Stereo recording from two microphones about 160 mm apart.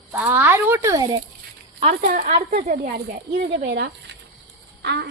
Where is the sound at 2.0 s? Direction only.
70° right (ahead or behind).